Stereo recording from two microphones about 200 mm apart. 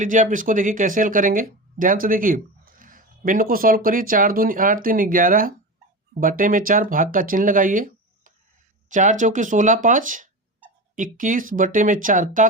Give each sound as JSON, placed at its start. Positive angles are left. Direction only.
{"t": 0.0, "sound": "speech", "side_deg": -40}